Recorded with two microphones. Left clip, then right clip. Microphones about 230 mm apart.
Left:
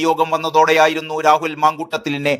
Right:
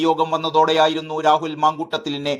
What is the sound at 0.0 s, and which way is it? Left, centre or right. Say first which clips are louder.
Speech: left 2 dB; left.